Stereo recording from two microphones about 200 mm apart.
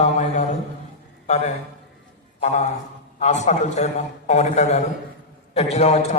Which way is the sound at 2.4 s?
35° left (ahead or behind).